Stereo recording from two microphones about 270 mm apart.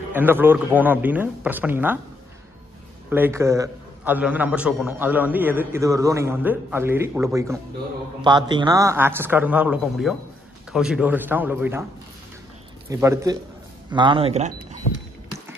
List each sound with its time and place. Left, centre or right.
0.1 s a man's voice: centre
3.1 s a man's voice: centre
12.9 s a man's voice: centre